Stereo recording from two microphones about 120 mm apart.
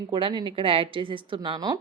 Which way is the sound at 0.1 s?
45° right (ahead or behind).